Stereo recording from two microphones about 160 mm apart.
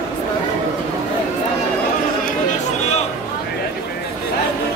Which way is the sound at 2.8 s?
45° left (ahead or behind).